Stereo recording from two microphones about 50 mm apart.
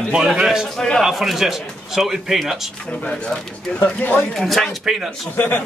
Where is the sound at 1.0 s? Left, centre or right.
Centre.